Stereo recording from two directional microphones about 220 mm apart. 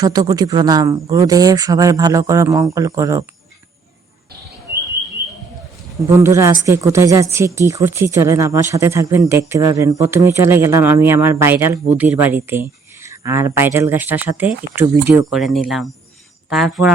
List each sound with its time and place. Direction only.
0.0 s speech: 15° right (ahead or behind)
6.1 s speech: 10° right (ahead or behind)